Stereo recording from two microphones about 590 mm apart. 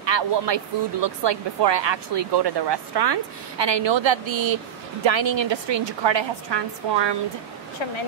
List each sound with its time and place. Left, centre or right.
0.0 s speech: right